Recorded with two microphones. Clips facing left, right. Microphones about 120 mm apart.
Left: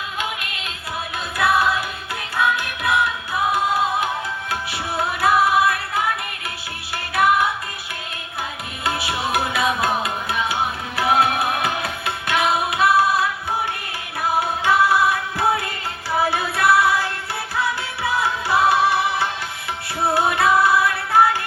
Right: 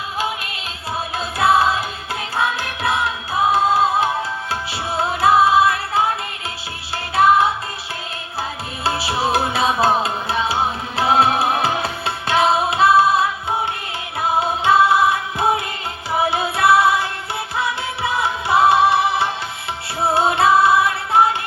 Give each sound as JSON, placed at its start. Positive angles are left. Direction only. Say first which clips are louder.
{"t": 1.4, "sound": "music", "louder": "right 3 dB", "side_deg": -25}
{"t": 8.8, "sound": "music", "louder": "right 3 dB", "side_deg": -30}